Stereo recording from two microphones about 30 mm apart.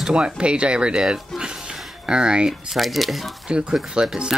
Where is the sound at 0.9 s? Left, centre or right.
Right.